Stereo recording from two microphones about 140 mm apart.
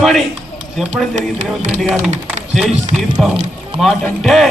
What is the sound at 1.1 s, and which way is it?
Speech, 60° right (ahead or behind).